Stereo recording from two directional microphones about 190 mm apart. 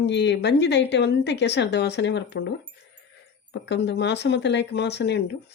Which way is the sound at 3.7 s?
65° left (ahead or behind).